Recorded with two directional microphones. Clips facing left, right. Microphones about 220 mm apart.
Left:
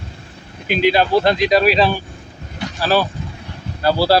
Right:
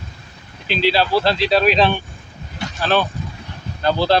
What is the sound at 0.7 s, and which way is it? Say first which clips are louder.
Speech: left 3 dB; 50° left (ahead or behind).